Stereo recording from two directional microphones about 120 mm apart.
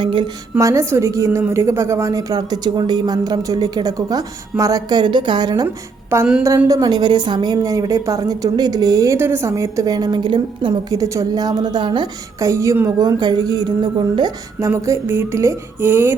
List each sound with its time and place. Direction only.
0.0 s a woman's voice: 45° right (ahead or behind)
0.6 s a woman's voice: 25° right (ahead or behind)
5.6 s a woman's voice: 20° right (ahead or behind)
6.7 s a woman's voice: 30° right (ahead or behind)
10.9 s a woman's voice: 25° right (ahead or behind)
12.4 s a woman's voice: 25° right (ahead or behind)
13.0 s a woman's voice: 35° right (ahead or behind)
14.7 s a woman's voice: 20° right (ahead or behind)